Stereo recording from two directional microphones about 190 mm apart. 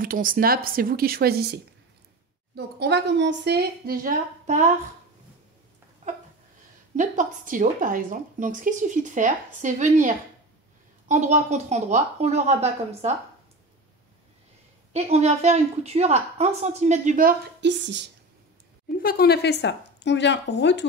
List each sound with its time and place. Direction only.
0.0 s a woman's voice: 50° right (ahead or behind)
6.0 s a sound: 40° right (ahead or behind)
7.0 s a woman's voice: 45° right (ahead or behind)
14.9 s a woman's voice: 35° right (ahead or behind); by 18.1 s 70° right (ahead or behind)
18.9 s a woman's voice: 50° left (ahead or behind)